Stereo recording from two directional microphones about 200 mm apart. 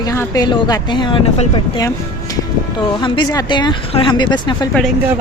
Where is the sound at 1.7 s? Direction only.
15° left (ahead or behind).